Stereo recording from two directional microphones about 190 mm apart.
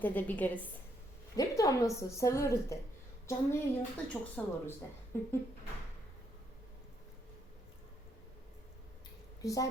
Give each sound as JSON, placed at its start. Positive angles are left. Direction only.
{"t": 0.0, "sound": "a woman's voice", "side_deg": 10}
{"t": 9.4, "sound": "a woman's voice", "side_deg": 15}